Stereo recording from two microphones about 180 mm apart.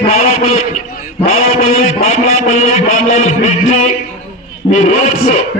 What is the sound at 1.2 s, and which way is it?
A man's voice, 35° left (ahead or behind).